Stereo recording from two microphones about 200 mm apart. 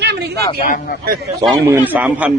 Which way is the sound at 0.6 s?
45° left (ahead or behind).